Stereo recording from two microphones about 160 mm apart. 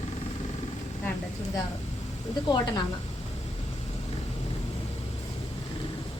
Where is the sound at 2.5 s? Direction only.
25° left (ahead or behind).